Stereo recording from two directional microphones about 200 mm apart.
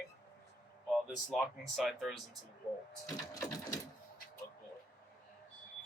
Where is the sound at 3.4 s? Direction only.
15° left (ahead or behind).